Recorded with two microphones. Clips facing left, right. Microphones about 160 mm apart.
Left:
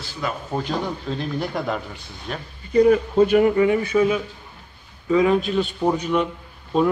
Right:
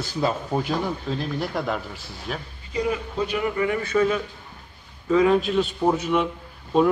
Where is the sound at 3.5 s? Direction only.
20° left (ahead or behind).